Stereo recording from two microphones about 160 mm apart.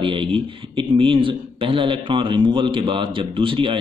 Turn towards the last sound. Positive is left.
turn(degrees=-30)  # may be behind; listen again after turning